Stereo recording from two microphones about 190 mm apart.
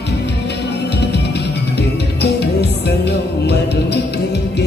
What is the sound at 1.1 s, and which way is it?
Music, 60° left (ahead or behind).